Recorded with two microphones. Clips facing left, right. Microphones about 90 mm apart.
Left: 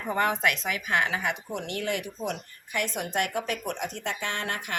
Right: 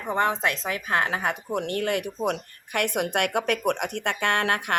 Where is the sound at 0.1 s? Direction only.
30° right (ahead or behind).